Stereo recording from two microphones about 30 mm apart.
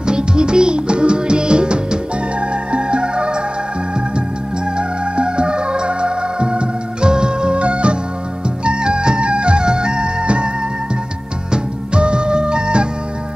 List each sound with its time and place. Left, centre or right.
0.0 s music: right
4.7 s music: right
11.5 s music: right